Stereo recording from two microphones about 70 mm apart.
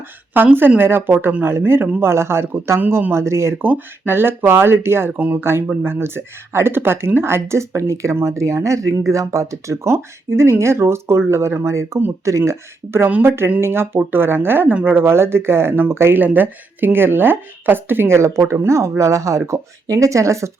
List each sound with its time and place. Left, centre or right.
0.3 s speech: right
16.1 s speech: right